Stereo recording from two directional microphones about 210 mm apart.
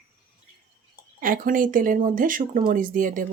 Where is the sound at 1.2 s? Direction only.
40° right (ahead or behind).